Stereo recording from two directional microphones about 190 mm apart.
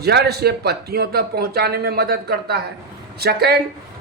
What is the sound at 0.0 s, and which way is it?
Speech, 60° right (ahead or behind).